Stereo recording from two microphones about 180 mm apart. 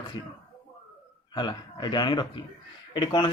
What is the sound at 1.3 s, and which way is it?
Speech, 25° left (ahead or behind).